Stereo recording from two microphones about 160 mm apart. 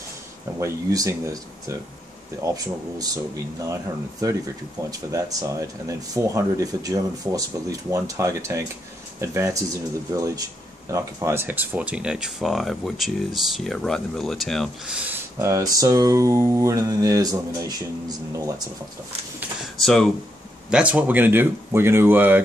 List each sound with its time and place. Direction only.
0.6 s speech: 20° right (ahead or behind)
5.1 s speech: 20° right (ahead or behind)
15.3 s speech: 20° right (ahead or behind)
19.8 s speech: centre (ahead or behind)
20.7 s speech: 10° right (ahead or behind)